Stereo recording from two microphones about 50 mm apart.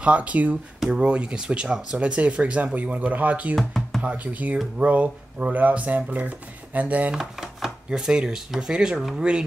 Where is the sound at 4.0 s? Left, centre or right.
Right.